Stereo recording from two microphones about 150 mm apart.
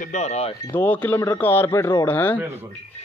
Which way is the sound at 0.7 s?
10° left (ahead or behind).